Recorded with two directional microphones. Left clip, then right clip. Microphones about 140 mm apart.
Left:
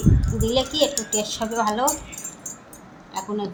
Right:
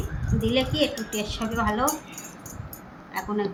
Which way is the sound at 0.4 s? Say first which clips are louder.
Left 3 dB; 70° left (ahead or behind).